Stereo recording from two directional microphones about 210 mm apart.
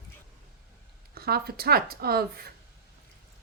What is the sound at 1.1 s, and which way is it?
Speech, 45° right (ahead or behind).